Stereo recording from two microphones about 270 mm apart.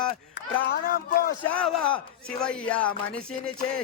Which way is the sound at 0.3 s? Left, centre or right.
Left.